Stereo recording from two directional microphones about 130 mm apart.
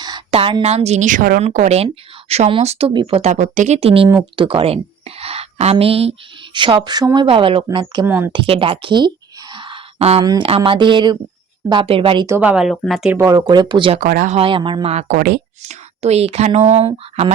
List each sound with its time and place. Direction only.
0.3 s a sound: 45° right (ahead or behind)
0.6 s a woman's voice: 55° right (ahead or behind)
3.3 s speech: 75° right (ahead or behind)
3.8 s a woman's voice: 45° right (ahead or behind)
7.3 s speech: 45° right (ahead or behind)
8.0 s speech: 15° right (ahead or behind)
8.3 s a sound: 40° right (ahead or behind)
10.2 s a woman's voice: 40° right (ahead or behind)
12.4 s speech: 10° right (ahead or behind)
12.7 s speech: 10° left (ahead or behind)
13.1 s a woman's voice: 25° right (ahead or behind)
14.0 s speech: 85° right
14.3 s speech: 40° right (ahead or behind)
15.6 s a woman's voice: 60° right (ahead or behind)